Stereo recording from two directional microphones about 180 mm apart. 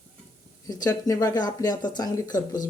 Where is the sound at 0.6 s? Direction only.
20° left (ahead or behind).